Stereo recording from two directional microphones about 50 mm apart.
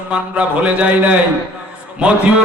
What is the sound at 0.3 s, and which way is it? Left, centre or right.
Speech, right.